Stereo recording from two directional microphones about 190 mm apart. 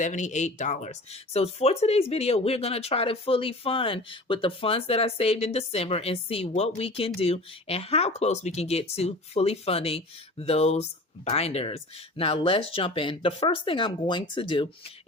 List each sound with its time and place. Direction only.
0.0 s speech: 40° left (ahead or behind)